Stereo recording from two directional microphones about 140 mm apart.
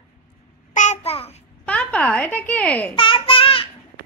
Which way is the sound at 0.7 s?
55° left (ahead or behind).